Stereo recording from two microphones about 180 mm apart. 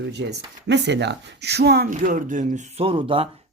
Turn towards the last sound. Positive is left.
turn(degrees=-30)  # may be behind; listen again after turning